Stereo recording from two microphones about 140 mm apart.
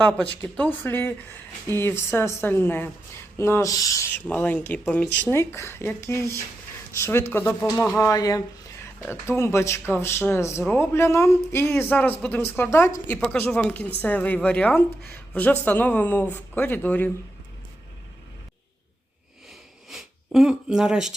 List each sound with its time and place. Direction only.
0.0 s speech: 10° left (ahead or behind)
4.3 s speech: 10° left (ahead or behind)
19.9 s speech: centre (ahead or behind)